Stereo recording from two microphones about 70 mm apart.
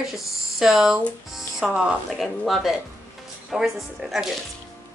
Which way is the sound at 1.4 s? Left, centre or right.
Centre.